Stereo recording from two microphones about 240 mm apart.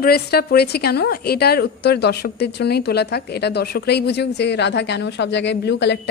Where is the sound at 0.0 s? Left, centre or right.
Left.